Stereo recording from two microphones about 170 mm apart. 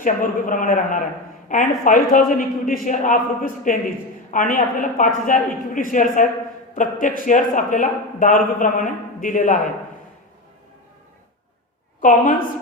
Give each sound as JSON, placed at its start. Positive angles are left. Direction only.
{"t": 0.0, "sound": "a man's voice", "side_deg": 50}
{"t": 11.9, "sound": "a woman's voice", "side_deg": 50}